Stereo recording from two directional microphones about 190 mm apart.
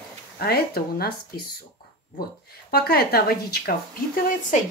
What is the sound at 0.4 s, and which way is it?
Speech, 55° left (ahead or behind).